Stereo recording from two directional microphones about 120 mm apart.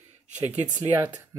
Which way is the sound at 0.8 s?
30° right (ahead or behind).